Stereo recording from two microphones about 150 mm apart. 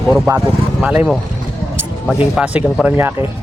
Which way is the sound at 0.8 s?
5° right (ahead or behind).